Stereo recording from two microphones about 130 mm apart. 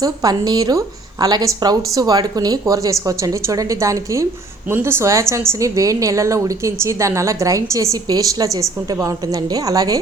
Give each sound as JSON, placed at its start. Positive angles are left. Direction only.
{"t": 0.0, "sound": "speech", "side_deg": -30}